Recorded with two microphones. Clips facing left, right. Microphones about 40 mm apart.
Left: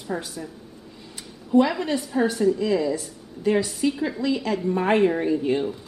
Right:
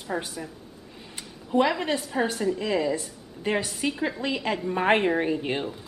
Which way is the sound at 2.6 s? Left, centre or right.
Right.